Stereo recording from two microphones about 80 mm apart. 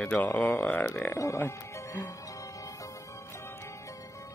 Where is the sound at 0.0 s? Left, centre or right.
Left.